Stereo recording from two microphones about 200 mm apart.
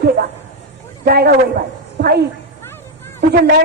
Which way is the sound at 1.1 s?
50° right (ahead or behind).